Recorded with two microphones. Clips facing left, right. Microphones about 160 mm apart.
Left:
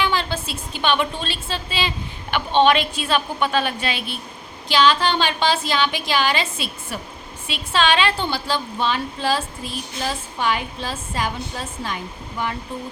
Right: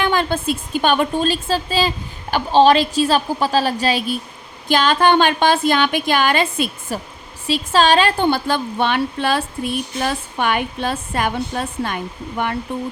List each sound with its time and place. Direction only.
0.0 s a woman's voice: 50° right (ahead or behind)
7.4 s a woman's voice: 40° right (ahead or behind); by 12.5 s 60° right (ahead or behind)